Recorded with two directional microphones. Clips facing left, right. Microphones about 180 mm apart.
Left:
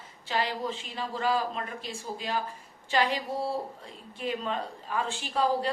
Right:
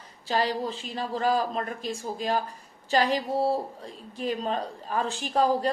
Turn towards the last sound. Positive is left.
turn(degrees=-45)  # may be behind; listen again after turning